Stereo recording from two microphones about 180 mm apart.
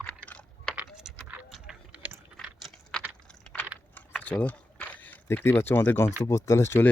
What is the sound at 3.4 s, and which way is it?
Computer keyboard, 5° left (ahead or behind).